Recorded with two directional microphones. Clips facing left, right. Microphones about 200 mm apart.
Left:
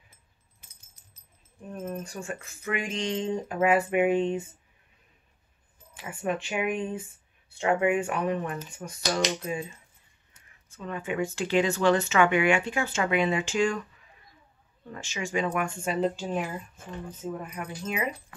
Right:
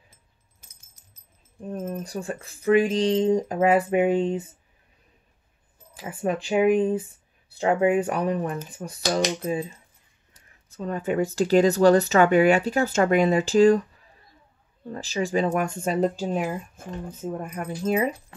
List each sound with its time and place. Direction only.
1.7 s speech: 35° right (ahead or behind)
5.9 s speech: 35° right (ahead or behind)